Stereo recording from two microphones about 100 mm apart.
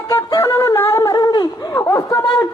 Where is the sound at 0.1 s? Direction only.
30° left (ahead or behind).